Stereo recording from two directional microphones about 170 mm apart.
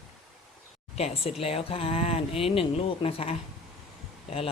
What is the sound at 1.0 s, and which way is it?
Speech, 35° left (ahead or behind).